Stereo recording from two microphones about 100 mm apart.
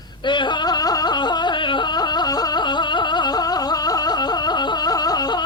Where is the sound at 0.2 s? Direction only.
50° left (ahead or behind).